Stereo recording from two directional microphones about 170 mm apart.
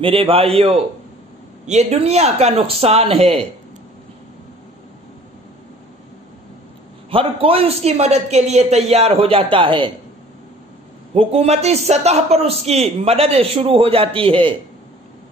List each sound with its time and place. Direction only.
0.0 s a man's voice: 30° right (ahead or behind)
1.7 s a man's voice: 40° right (ahead or behind)
7.1 s a man's voice: 35° right (ahead or behind)
11.1 s a man's voice: 40° right (ahead or behind)